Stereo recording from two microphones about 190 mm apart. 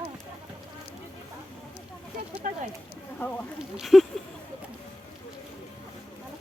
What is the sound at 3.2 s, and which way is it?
Speech, 10° left (ahead or behind).